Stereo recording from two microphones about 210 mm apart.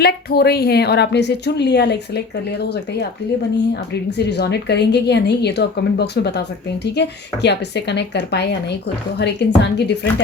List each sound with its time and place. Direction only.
0.0 s a woman's voice: 50° left (ahead or behind)
4.3 s a woman's voice: 50° left (ahead or behind)